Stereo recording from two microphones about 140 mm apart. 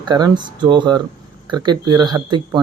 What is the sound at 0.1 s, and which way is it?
Speech, 30° right (ahead or behind).